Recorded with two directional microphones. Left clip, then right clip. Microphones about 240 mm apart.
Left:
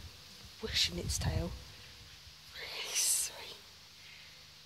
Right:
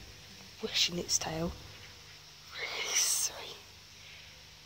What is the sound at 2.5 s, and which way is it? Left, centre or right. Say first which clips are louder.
Whispering: right 5 dB; centre.